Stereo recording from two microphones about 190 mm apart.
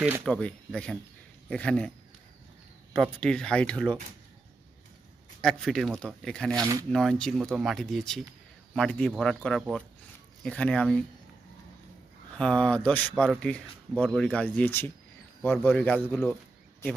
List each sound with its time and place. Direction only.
0.3 s speech: 5° left (ahead or behind)
2.9 s speech: 5° left (ahead or behind)
5.4 s speech: centre (ahead or behind)
6.5 s speech: 20° right (ahead or behind)
6.9 s speech: centre (ahead or behind)
12.3 s speech: 5° left (ahead or behind)